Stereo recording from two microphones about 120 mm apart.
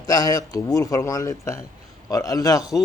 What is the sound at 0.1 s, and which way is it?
Speech, 30° left (ahead or behind).